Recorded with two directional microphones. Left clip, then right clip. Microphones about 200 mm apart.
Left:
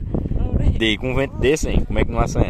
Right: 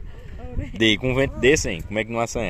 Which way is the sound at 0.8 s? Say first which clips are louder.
Right 1 dB; centre (ahead or behind).